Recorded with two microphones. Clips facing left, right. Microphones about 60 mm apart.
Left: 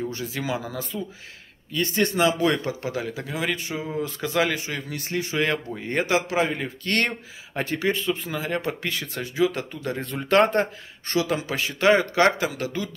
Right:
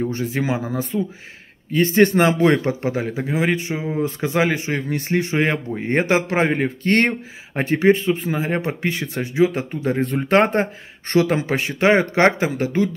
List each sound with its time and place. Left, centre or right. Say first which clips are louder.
0.0 s a man's voice: right 7 dB; right
11.1 s a man's voice: right 7 dB; right